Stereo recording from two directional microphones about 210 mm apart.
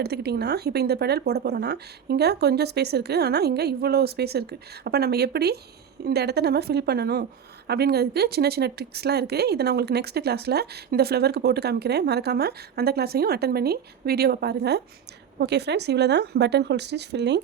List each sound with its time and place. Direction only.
0.0 s a woman's voice: 50° right (ahead or behind)